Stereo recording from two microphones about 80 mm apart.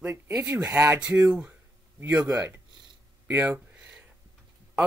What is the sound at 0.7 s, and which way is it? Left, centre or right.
Speech, right.